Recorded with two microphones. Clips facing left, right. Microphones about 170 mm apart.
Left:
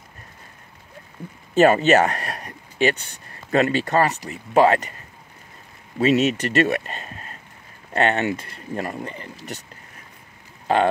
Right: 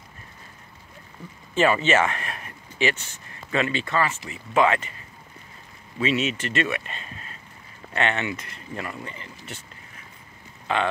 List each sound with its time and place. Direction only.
1.5 s a sound: 40° left (ahead or behind)
3.4 s speech: 40° left (ahead or behind)
5.9 s speech: 40° left (ahead or behind)
10.7 s speech: 40° left (ahead or behind)